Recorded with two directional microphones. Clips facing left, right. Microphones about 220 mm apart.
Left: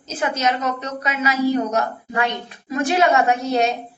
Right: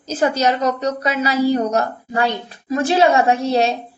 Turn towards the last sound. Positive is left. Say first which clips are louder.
# right 2 dB
turn(degrees=-30)  # may be behind; listen again after turning